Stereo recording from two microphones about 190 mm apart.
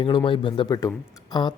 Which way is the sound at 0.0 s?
25° left (ahead or behind).